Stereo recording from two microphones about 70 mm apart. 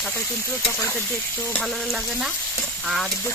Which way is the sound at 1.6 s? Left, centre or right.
Centre.